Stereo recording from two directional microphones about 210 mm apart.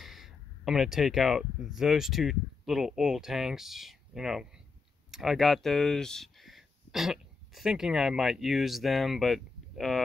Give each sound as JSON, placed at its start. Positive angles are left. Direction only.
{"t": 0.0, "sound": "speech", "side_deg": 0}